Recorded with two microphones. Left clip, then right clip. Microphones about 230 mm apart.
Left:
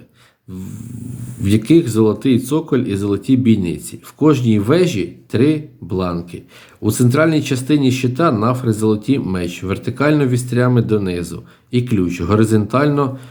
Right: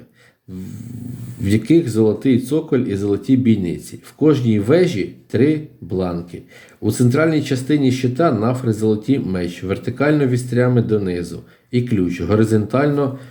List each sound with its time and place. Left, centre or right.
1.5 s speech: centre